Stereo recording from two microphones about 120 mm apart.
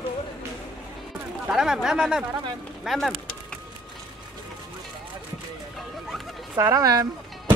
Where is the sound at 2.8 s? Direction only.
Centre (ahead or behind).